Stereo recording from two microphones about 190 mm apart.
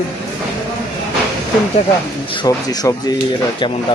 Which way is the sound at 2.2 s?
25° left (ahead or behind).